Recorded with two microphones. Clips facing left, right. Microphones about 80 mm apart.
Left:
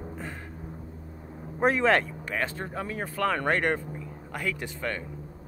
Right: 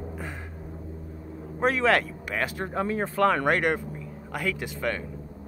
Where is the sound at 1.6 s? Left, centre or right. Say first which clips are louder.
Even; centre.